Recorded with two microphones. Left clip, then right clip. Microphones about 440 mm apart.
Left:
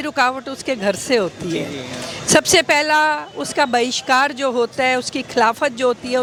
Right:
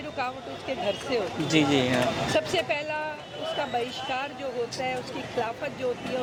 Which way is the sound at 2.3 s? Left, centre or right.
Left.